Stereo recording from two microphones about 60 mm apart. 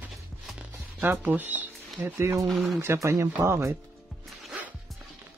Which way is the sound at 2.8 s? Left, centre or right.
Right.